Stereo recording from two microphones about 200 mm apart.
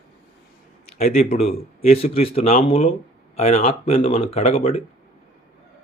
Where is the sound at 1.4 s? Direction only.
30° left (ahead or behind).